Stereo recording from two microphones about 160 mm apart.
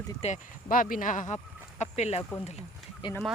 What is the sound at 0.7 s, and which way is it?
Speech, 60° left (ahead or behind).